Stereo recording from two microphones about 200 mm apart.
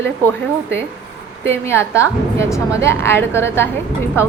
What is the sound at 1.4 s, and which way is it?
A woman's voice, 10° left (ahead or behind).